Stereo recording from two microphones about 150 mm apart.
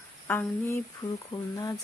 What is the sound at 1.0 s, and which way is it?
Speech, 25° left (ahead or behind).